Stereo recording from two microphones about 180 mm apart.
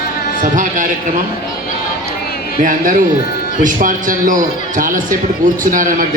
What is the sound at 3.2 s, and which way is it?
Speech, 60° left (ahead or behind).